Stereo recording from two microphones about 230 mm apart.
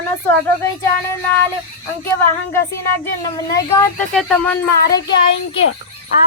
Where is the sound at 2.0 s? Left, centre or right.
Centre.